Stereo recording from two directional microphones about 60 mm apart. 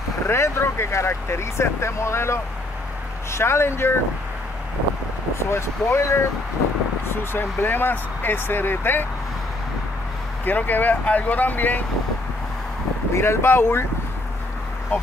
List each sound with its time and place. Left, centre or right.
0.3 s speech: left
5.5 s speech: left
7.3 s speech: left
10.4 s speech: left
13.1 s speech: left